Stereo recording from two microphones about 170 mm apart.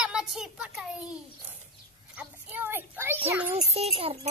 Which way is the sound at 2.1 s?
10° right (ahead or behind).